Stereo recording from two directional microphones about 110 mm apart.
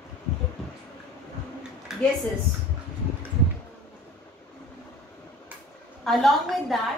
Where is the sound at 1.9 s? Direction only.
5° right (ahead or behind).